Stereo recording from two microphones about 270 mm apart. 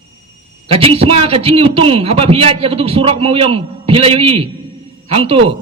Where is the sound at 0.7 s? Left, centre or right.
Right.